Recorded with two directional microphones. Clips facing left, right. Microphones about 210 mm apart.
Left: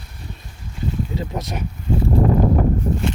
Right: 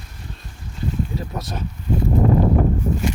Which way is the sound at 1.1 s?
20° left (ahead or behind).